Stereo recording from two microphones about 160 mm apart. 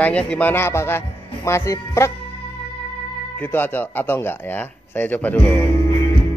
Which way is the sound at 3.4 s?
10° left (ahead or behind).